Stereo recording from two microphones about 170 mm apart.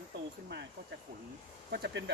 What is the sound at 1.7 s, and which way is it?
Speech, 75° right (ahead or behind).